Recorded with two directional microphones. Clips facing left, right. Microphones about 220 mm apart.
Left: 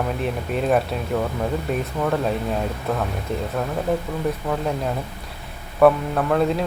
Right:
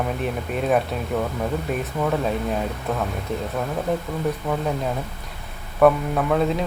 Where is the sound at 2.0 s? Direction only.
Centre (ahead or behind).